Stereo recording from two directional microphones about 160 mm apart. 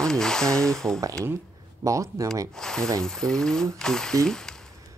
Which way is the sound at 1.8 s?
20° right (ahead or behind).